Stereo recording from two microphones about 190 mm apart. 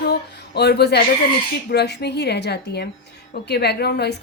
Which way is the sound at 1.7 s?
60° left (ahead or behind).